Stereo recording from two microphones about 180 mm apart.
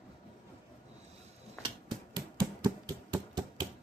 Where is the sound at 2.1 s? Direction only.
25° right (ahead or behind).